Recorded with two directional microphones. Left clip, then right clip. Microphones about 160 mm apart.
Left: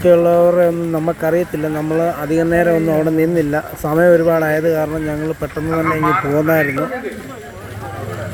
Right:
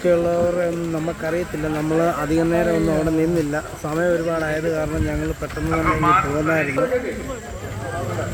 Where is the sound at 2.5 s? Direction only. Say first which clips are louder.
Left 5 dB; 20° left (ahead or behind).